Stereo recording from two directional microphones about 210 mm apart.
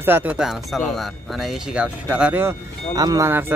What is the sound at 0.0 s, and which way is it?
Speech, 10° right (ahead or behind).